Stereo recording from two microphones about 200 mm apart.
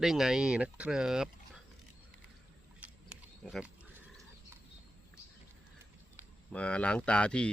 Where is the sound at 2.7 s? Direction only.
5° right (ahead or behind).